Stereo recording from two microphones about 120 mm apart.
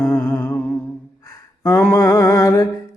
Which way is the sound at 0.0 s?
10° left (ahead or behind).